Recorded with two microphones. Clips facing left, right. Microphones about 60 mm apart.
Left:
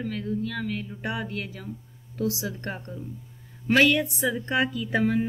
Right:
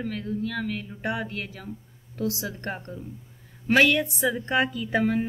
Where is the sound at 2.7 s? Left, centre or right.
Centre.